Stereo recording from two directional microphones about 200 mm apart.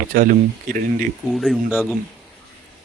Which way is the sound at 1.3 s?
Centre (ahead or behind).